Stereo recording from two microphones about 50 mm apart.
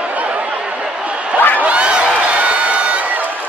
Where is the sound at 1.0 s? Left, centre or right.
Right.